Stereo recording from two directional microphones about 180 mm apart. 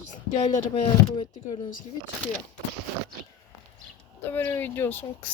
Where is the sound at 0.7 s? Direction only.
25° left (ahead or behind).